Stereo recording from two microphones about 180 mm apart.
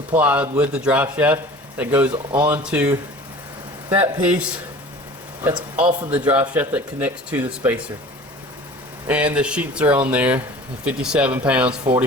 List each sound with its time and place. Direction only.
0.1 s speech: 10° right (ahead or behind)
5.7 s speech: 10° right (ahead or behind)
9.0 s speech: 10° right (ahead or behind)